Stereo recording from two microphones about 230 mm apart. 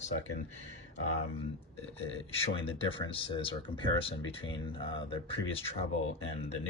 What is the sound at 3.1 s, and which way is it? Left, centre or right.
Speech, left.